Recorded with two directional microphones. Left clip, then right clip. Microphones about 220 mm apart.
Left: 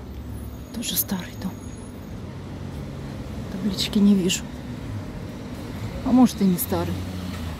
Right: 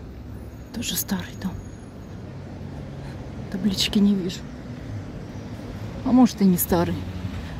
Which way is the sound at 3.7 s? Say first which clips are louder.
Right 2 dB; 10° right (ahead or behind).